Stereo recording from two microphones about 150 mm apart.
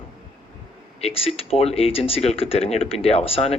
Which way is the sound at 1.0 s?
40° left (ahead or behind).